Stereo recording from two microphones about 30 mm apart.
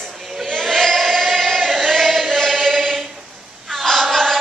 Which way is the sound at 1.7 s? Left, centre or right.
Centre.